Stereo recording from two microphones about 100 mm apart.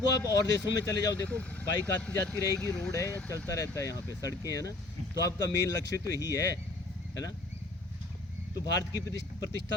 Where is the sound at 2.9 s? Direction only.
30° left (ahead or behind).